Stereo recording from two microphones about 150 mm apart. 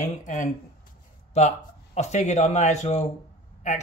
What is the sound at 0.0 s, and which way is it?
Speech, 55° left (ahead or behind).